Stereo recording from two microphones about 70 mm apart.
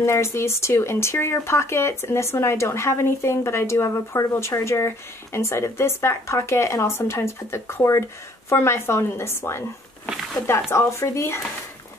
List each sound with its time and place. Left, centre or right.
0.0 s speech: left
10.7 s speech: left